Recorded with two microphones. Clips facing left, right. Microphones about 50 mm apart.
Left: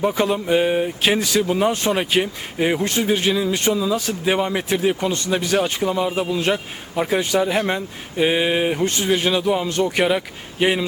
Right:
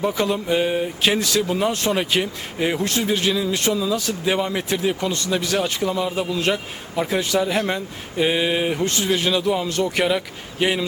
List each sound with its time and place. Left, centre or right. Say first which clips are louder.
0.1 s a man's voice: left 2 dB; left
5.1 s a man's voice: left 2 dB; left
9.6 s a man's voice: left 2 dB; left
10.0 s speech: left 2 dB; centre